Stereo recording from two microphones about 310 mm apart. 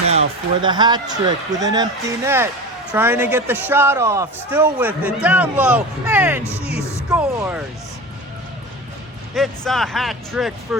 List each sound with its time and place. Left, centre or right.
0.1 s a man's voice: centre
7.1 s music: centre
9.3 s speech: centre